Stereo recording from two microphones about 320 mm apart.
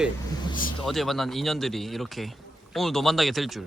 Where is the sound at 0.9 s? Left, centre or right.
Centre.